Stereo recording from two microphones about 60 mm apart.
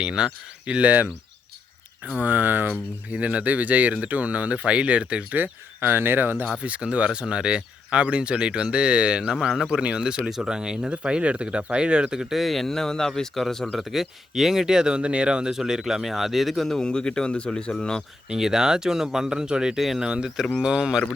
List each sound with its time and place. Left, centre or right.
0.0 s speech: centre
2.1 s speech: right
5.4 s speech: right
6.6 s speech: right
12.2 s speech: centre
13.7 s speech: centre
18.3 s speech: centre